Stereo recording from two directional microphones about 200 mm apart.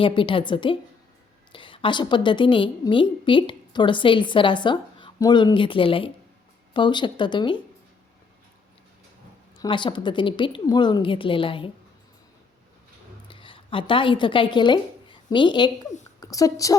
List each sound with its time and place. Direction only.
0.0 s a woman's voice: 25° left (ahead or behind)
9.6 s a woman's voice: 25° left (ahead or behind)
13.2 s a woman's voice: 25° left (ahead or behind)